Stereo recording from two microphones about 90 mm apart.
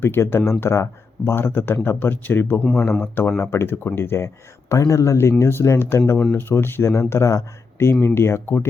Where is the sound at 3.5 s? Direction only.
25° left (ahead or behind).